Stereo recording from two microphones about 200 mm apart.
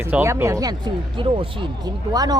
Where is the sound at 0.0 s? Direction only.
10° right (ahead or behind).